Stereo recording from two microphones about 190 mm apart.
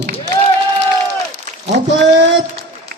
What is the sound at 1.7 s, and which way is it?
Speech, 70° right (ahead or behind).